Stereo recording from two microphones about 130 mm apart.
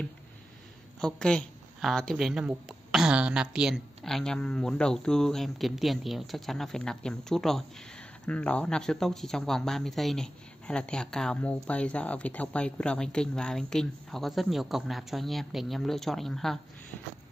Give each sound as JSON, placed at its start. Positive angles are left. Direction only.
{"t": 1.0, "sound": "a woman's voice", "side_deg": 5}